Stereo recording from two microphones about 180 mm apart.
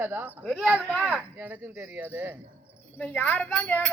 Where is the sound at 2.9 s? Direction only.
10° left (ahead or behind).